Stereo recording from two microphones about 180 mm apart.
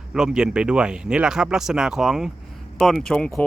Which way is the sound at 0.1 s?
5° right (ahead or behind).